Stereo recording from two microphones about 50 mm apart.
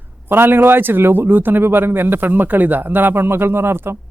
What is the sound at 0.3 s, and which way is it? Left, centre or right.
A man's voice, right.